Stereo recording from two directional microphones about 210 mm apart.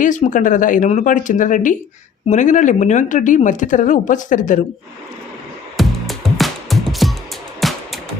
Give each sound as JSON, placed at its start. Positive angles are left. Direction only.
{"t": 0.0, "sound": "speech", "side_deg": 35}
{"t": 5.7, "sound": "music", "side_deg": 0}